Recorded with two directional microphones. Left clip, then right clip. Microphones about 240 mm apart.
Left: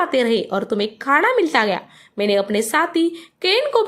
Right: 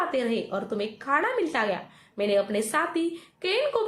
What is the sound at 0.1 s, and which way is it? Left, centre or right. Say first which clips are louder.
A woman's voice: left 9 dB; left.